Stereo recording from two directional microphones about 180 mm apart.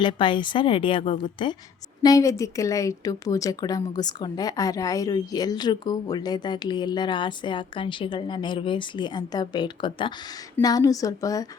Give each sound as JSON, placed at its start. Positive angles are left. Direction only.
{"t": 0.0, "sound": "a woman's voice", "side_deg": 25}